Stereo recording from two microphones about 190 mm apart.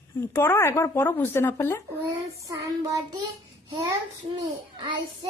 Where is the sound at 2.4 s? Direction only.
15° right (ahead or behind).